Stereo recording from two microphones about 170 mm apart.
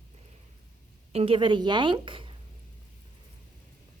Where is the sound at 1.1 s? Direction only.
30° right (ahead or behind).